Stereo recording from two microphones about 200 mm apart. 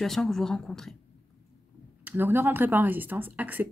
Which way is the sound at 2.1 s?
10° right (ahead or behind).